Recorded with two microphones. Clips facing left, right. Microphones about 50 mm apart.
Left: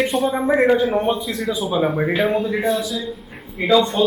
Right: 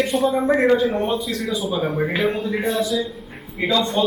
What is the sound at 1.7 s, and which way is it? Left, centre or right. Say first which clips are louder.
A man's voice: left 4 dB; centre.